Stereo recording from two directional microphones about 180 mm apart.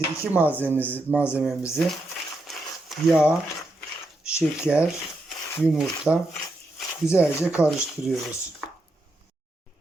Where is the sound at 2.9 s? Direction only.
5° right (ahead or behind).